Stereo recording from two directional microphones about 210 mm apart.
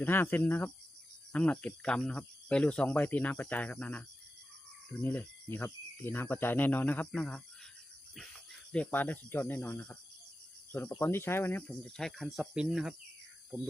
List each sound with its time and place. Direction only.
0.0 s speech: 10° left (ahead or behind)
8.7 s speech: 5° left (ahead or behind)